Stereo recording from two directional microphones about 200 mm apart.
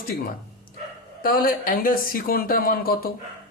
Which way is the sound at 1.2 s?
45° left (ahead or behind).